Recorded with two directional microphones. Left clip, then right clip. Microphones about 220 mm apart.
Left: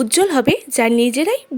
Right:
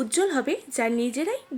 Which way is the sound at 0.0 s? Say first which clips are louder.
Left 9 dB; 40° left (ahead or behind).